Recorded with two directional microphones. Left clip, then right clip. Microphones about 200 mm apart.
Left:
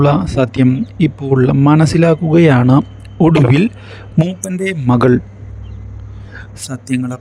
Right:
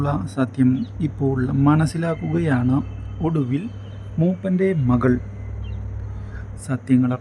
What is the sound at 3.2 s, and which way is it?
Speech, 55° left (ahead or behind).